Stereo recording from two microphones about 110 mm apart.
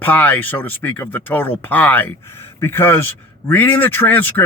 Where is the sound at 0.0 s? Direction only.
15° left (ahead or behind).